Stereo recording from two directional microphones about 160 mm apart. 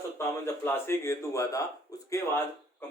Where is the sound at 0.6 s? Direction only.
15° left (ahead or behind).